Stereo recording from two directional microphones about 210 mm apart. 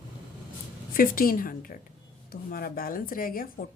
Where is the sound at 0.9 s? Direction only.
45° left (ahead or behind).